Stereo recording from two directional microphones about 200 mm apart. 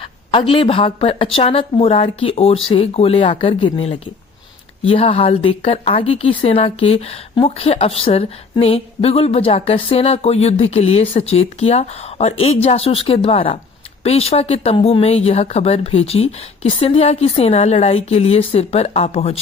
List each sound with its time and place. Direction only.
0.0 s speech: 25° left (ahead or behind)